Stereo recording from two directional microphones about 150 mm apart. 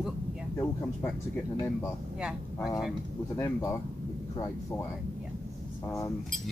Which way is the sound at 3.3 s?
20° left (ahead or behind).